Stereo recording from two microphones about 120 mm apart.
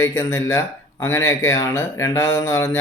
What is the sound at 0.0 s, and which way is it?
Speech, 25° left (ahead or behind).